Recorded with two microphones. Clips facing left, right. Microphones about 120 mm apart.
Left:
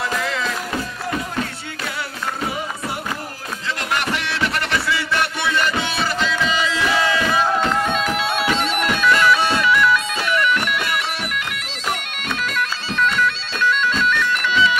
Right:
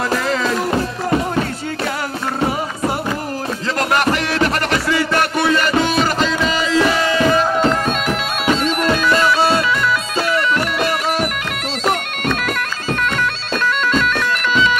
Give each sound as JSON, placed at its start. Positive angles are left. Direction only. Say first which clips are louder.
{"t": 0.1, "sound": "music", "louder": "right 5 dB", "side_deg": -40}
{"t": 3.9, "sound": "music", "louder": "right 5 dB", "side_deg": -45}
{"t": 8.5, "sound": "bagpipes", "louder": "right 4 dB", "side_deg": -35}
{"t": 11.8, "sound": "bagpipes", "louder": "right 7 dB", "side_deg": -55}